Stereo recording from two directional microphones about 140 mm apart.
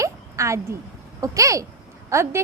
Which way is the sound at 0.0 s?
20° right (ahead or behind).